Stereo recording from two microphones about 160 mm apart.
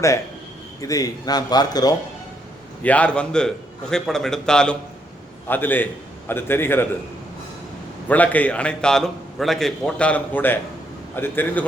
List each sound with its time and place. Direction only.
0.8 s speech: 20° left (ahead or behind)
2.8 s a man's voice: 10° left (ahead or behind)
8.0 s a man's voice: 10° left (ahead or behind)